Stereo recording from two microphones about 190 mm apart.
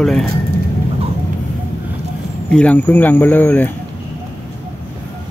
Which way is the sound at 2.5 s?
5° left (ahead or behind).